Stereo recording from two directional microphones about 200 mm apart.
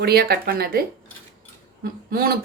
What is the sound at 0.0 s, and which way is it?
Speech, 50° right (ahead or behind).